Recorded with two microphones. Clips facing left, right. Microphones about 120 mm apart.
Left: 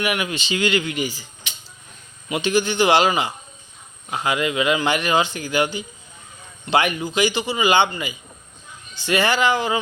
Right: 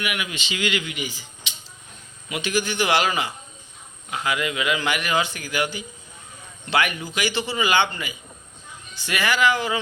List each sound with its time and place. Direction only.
0.0 s speech: 35° left (ahead or behind)
2.3 s a man's voice: 25° left (ahead or behind)